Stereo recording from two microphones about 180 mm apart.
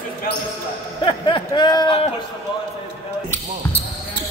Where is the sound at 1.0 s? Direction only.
30° left (ahead or behind).